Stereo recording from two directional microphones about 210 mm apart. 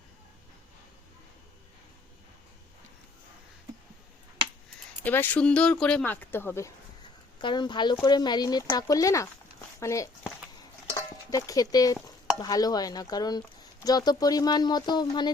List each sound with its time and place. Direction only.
5.0 s speech: 10° left (ahead or behind)
7.3 s speech: 20° left (ahead or behind)
10.9 s stir: 15° left (ahead or behind)
12.4 s speech: 20° left (ahead or behind)